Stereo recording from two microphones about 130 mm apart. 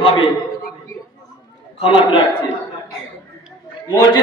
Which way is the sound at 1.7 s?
45° left (ahead or behind).